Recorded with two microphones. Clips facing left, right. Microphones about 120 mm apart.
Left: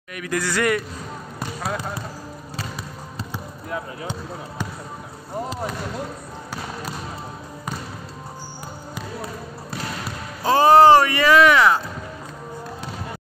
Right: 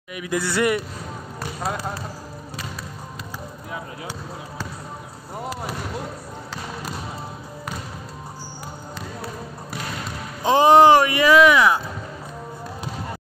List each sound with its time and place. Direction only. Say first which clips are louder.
0.1 s speech: even; 15° right (ahead or behind)
10.4 s speech: even; 20° right (ahead or behind)